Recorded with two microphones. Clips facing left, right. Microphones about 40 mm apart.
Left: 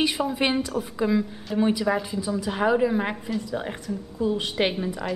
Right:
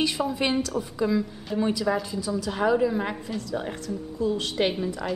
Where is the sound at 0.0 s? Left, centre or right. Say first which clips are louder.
Left 2 dB; centre.